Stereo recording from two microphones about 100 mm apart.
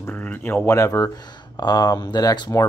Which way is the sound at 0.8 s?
30° left (ahead or behind).